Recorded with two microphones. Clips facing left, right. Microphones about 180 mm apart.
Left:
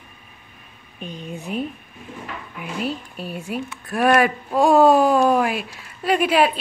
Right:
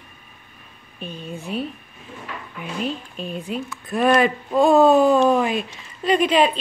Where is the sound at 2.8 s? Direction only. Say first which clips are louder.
Even; 10° left (ahead or behind).